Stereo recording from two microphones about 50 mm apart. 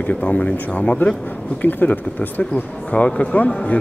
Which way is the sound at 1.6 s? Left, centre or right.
Left.